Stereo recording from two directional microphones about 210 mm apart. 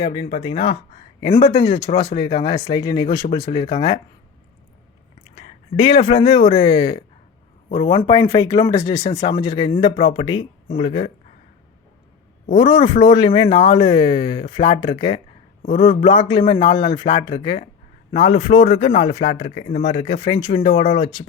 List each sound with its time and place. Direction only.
0.0 s speech: 25° left (ahead or behind)
5.3 s speech: 30° left (ahead or behind)
12.5 s speech: 20° left (ahead or behind)